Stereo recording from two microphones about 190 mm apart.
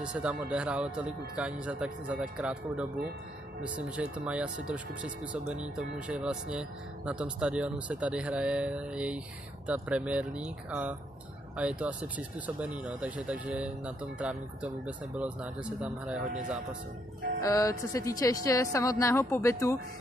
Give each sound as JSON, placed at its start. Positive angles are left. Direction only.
{"t": 0.0, "sound": "speech", "side_deg": -5}
{"t": 17.4, "sound": "speech", "side_deg": 15}